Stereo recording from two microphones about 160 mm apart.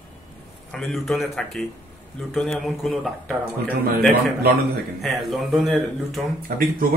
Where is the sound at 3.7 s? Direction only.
70° right (ahead or behind).